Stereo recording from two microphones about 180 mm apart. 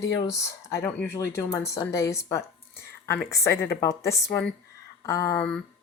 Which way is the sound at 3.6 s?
15° left (ahead or behind).